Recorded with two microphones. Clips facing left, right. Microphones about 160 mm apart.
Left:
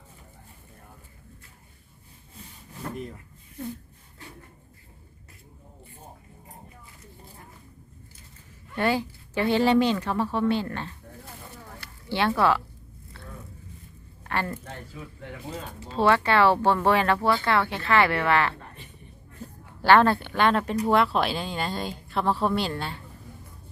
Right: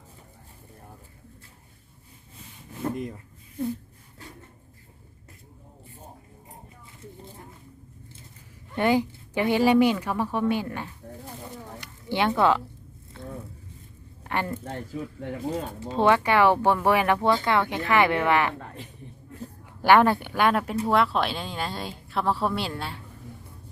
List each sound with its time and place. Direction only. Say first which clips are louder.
8.7 s speech: right 3 dB; 15° right (ahead or behind)
11.7 s a sound: right 1 dB; 15° right (ahead or behind)
13.2 s vehicle: right 7 dB; 20° right (ahead or behind)
14.3 s speech: right 1 dB; 15° right (ahead or behind)
14.6 s speech: right 7 dB; 35° right (ahead or behind)
15.9 s speech: right 1 dB; 15° right (ahead or behind)
19.8 s speech: even; 15° right (ahead or behind)